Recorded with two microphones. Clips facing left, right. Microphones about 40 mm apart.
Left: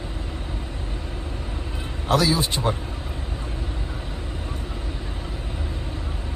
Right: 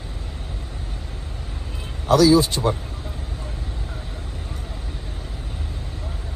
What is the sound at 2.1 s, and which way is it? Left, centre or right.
Speech, left.